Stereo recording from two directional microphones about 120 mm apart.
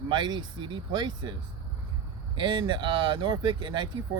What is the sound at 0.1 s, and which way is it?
Speech, 40° right (ahead or behind).